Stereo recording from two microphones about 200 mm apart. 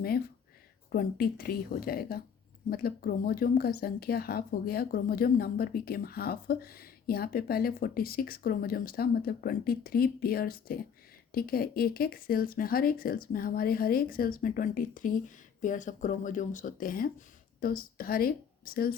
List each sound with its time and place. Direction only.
0.9 s speech: 50° left (ahead or behind)